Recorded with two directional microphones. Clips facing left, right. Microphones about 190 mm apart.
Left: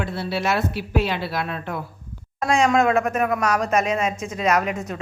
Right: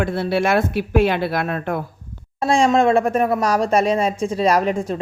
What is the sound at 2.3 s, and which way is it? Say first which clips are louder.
Speech: right 3 dB; 30° right (ahead or behind).